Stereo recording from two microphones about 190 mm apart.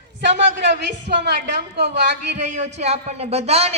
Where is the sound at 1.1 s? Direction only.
50° right (ahead or behind).